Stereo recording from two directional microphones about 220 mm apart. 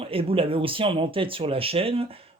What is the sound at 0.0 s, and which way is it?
Speech, 25° right (ahead or behind).